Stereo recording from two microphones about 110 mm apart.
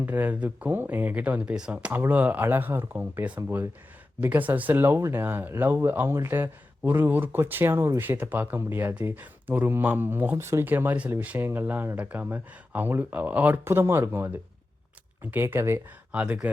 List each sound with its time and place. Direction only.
0.0 s speech: 15° right (ahead or behind)